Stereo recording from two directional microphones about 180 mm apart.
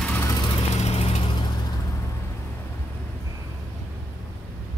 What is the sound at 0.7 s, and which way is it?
Vehicle, 35° left (ahead or behind).